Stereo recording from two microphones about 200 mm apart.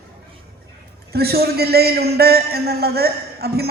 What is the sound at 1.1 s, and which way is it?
A man's voice, 50° right (ahead or behind).